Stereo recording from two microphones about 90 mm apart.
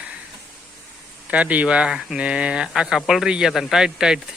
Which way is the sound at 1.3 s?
15° right (ahead or behind).